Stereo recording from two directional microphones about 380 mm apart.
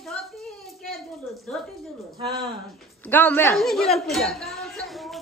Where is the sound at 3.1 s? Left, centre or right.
Centre.